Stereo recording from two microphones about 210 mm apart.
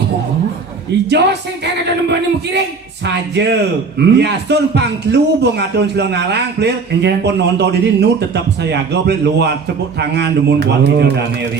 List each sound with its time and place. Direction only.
1.1 s speech: 55° right (ahead or behind)